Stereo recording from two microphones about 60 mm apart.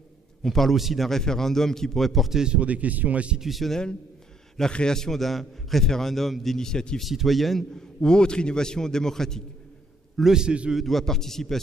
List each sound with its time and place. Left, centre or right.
0.4 s a man's voice: centre
2.4 s speech: centre
3.3 s a man's voice: centre
4.6 s a man's voice: centre
7.0 s a man's voice: centre
10.1 s a man's voice: centre
10.7 s a man's voice: centre